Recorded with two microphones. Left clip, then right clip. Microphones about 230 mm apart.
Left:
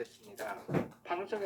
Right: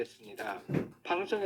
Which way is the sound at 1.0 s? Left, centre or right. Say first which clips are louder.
Right 9 dB; right.